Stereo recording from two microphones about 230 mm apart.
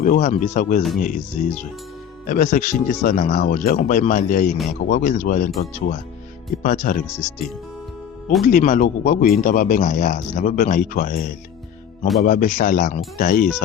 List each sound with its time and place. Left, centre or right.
0.0 s a man's voice: left
6.6 s a man's voice: left
7.1 s speech: centre
8.4 s a man's voice: left